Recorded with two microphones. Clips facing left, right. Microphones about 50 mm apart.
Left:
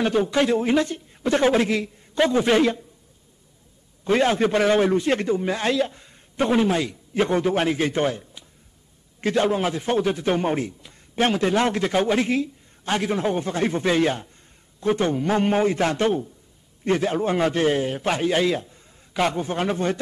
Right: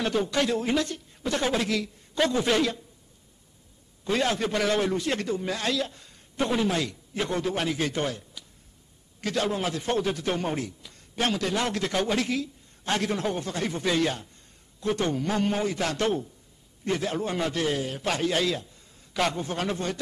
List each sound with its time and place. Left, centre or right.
0.0 s a man's voice: centre
4.0 s a man's voice: left
7.2 s a man's voice: left
12.8 s a man's voice: centre